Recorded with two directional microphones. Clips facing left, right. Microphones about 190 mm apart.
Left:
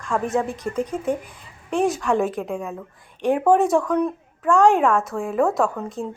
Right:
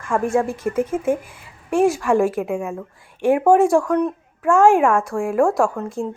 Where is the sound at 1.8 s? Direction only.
Centre (ahead or behind).